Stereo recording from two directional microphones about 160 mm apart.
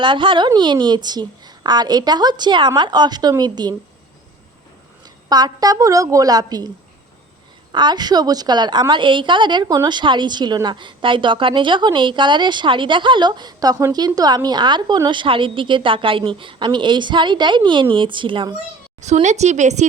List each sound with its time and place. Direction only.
0.0 s a woman's voice: 30° right (ahead or behind)
5.0 s a woman's voice: 25° right (ahead or behind)
7.7 s a woman's voice: 30° right (ahead or behind)
18.9 s speech: 45° right (ahead or behind)